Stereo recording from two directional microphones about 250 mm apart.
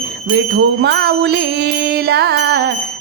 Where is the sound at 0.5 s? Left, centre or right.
Right.